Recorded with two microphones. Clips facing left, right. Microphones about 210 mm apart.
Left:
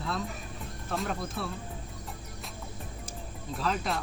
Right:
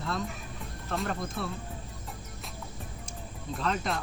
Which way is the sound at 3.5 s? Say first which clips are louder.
Even; centre (ahead or behind).